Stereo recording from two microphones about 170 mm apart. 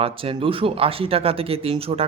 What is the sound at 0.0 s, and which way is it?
Speech, 30° right (ahead or behind).